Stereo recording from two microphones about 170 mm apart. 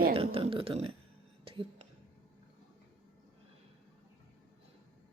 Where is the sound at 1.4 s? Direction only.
35° right (ahead or behind).